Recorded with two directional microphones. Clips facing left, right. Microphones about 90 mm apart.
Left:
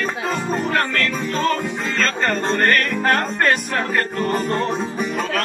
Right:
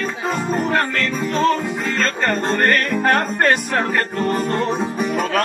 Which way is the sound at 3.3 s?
40° right (ahead or behind).